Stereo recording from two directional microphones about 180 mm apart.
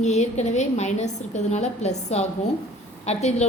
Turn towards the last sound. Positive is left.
turn(degrees=35)  # may be behind; listen again after turning